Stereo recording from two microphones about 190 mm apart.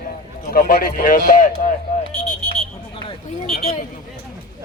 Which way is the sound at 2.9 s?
30° left (ahead or behind).